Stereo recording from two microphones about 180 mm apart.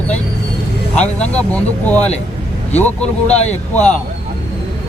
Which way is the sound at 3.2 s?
40° left (ahead or behind).